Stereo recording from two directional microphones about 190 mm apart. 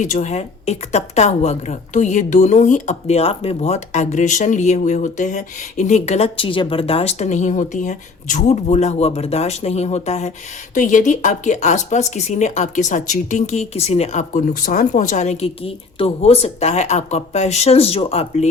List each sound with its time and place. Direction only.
0.0 s a woman's voice: 40° left (ahead or behind)